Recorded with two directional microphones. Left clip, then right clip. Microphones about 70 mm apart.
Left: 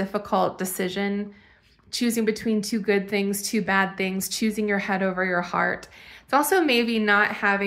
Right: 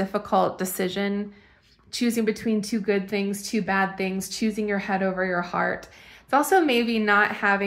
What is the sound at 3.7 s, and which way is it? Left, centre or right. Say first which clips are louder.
Speech: left 1 dB; left.